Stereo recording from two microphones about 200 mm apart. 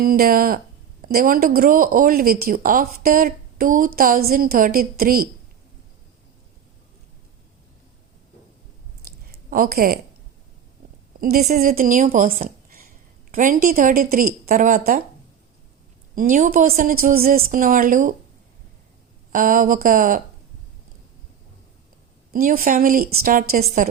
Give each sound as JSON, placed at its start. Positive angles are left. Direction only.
{"t": 0.0, "sound": "speech", "side_deg": -45}
{"t": 9.5, "sound": "speech", "side_deg": -45}
{"t": 11.2, "sound": "a woman's voice", "side_deg": -50}
{"t": 16.1, "sound": "speech", "side_deg": -45}
{"t": 19.3, "sound": "speech", "side_deg": -45}
{"t": 22.3, "sound": "speech", "side_deg": -45}